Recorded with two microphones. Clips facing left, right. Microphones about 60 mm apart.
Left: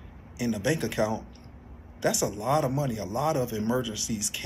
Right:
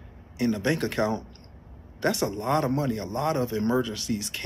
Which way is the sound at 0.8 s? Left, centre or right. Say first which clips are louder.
Right 1 dB; centre.